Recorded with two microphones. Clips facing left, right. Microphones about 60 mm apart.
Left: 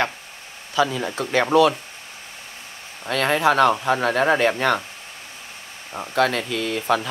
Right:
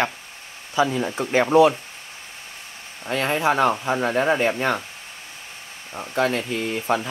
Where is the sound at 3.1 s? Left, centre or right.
Left.